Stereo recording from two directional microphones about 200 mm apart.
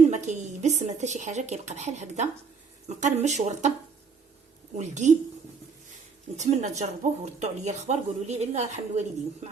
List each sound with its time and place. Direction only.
0.1 s speech: 35° right (ahead or behind)
4.8 s speech: 35° right (ahead or behind)
6.3 s speech: 35° right (ahead or behind)